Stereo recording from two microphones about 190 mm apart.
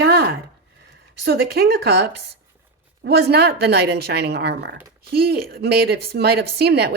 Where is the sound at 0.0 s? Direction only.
60° right (ahead or behind).